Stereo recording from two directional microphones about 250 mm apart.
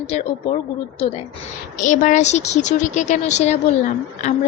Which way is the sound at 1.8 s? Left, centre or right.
Left.